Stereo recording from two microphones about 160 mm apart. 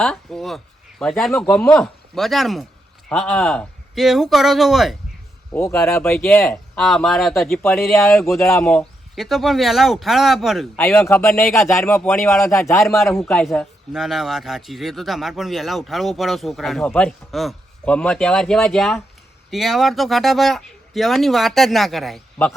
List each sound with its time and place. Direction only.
0.0 s a man's voice: 5° left (ahead or behind)
5.9 s speech: 15° left (ahead or behind)
6.4 s a man's voice: centre (ahead or behind)
8.4 s speech: 20° left (ahead or behind)
8.6 s a man's voice: 5° left (ahead or behind)
10.8 s speech: 15° left (ahead or behind)
13.3 s a man's voice: centre (ahead or behind)